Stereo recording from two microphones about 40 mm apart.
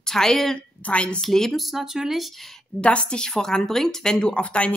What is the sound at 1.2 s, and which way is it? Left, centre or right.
Speech, centre.